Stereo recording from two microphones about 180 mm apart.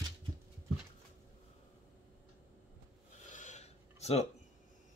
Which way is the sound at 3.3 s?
40° left (ahead or behind).